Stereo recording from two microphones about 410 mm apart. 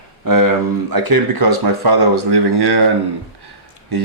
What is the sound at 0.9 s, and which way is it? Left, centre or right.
Speech, right.